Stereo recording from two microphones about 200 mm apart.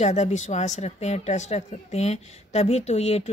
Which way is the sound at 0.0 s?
35° left (ahead or behind).